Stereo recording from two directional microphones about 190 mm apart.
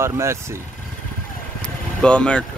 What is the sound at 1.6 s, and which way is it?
Vehicle, 5° left (ahead or behind).